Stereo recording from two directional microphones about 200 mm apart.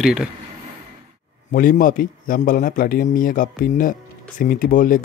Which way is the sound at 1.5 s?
45° left (ahead or behind).